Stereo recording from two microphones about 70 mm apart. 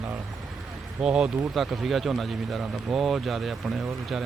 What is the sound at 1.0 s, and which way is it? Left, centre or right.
Speech, centre.